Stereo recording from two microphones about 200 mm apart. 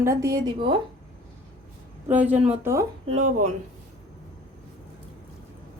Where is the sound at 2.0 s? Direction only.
10° right (ahead or behind).